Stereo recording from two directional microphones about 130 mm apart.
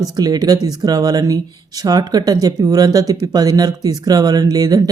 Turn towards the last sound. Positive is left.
turn(degrees=-30)  # may be behind; listen again after turning